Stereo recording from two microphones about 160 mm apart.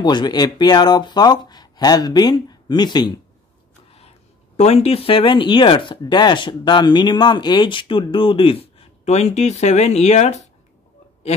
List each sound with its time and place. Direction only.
0.0 s speech: 25° left (ahead or behind)
4.6 s speech: 40° left (ahead or behind)